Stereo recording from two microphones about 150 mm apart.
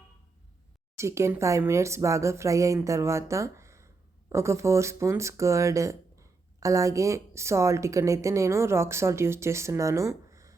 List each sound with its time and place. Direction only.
0.9 s speech: 20° right (ahead or behind)